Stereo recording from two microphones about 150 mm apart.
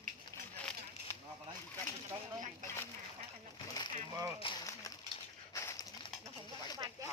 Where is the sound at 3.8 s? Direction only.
25° left (ahead or behind).